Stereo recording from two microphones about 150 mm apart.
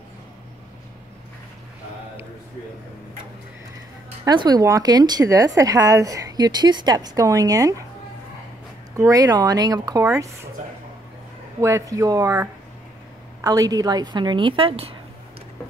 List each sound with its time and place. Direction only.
4.2 s speech: 25° right (ahead or behind)
8.9 s speech: 20° right (ahead or behind)
11.6 s speech: 20° right (ahead or behind); by 14.9 s 40° right (ahead or behind)